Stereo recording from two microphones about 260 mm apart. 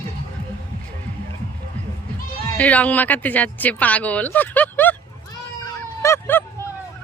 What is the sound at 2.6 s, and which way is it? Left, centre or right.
Speech, centre.